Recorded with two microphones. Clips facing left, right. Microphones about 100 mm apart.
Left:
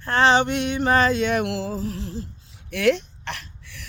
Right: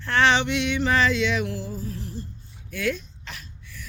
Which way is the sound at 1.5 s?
90° left.